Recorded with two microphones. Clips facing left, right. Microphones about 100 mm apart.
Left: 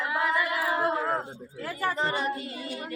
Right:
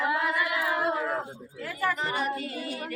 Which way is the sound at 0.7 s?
35° left (ahead or behind).